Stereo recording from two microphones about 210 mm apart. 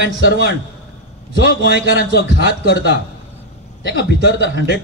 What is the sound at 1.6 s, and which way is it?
Speech, 55° right (ahead or behind).